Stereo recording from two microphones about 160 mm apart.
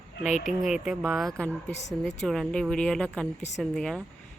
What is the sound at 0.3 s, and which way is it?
Speech, 50° left (ahead or behind).